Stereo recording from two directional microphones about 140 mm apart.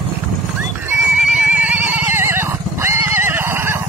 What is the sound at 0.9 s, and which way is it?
Neigh, 5° right (ahead or behind).